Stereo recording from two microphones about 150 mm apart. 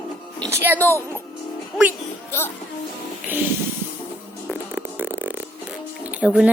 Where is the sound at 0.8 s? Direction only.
15° left (ahead or behind).